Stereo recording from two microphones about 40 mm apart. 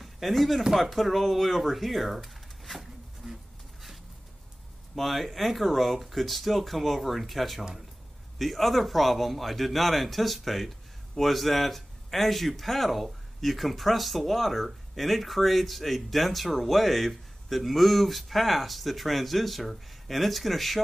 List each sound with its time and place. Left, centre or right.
0.0 s a man's voice: centre
2.6 s pigeon: centre
3.2 s a sound: centre
4.9 s a man's voice: centre